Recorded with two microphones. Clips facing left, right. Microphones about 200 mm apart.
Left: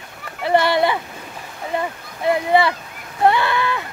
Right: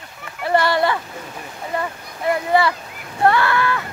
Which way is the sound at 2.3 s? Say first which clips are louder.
Left 1 dB; 20° left (ahead or behind).